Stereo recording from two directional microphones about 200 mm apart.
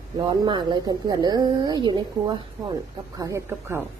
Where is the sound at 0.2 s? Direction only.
25° right (ahead or behind).